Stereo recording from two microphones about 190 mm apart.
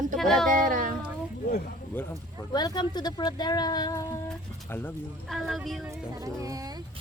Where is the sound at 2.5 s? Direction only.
20° left (ahead or behind).